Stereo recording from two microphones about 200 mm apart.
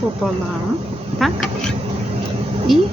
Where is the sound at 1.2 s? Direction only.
Centre (ahead or behind).